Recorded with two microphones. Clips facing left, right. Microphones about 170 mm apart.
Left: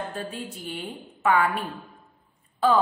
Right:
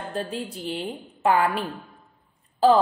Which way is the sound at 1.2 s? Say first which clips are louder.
Right 1 dB; 30° right (ahead or behind).